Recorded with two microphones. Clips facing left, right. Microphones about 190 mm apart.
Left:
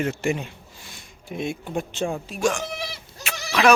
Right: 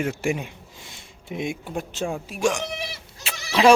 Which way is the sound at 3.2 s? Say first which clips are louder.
Right 2 dB; 30° right (ahead or behind).